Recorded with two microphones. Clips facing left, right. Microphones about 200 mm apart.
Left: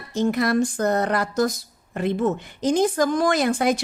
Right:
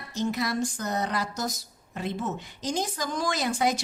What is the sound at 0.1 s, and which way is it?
A woman's voice, 55° left (ahead or behind).